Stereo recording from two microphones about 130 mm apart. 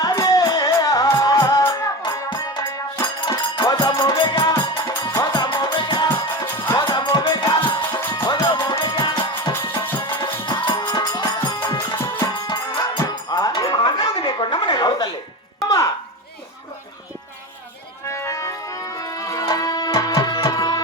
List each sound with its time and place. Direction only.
0.0 s music: 30° left (ahead or behind)
8.2 s music: 20° left (ahead or behind)
9.5 s music: 20° left (ahead or behind)
10.2 s music: 35° left (ahead or behind)
18.1 s music: 25° left (ahead or behind)